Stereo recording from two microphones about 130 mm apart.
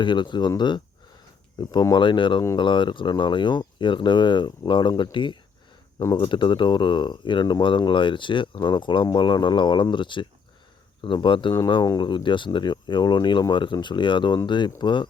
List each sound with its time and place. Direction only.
0.0 s speech: 35° left (ahead or behind)